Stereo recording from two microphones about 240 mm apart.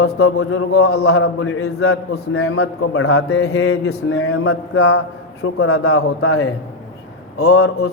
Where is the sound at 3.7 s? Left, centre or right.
Left.